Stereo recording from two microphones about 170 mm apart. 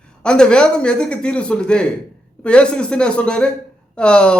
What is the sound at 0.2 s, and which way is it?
A man's voice, 5° left (ahead or behind).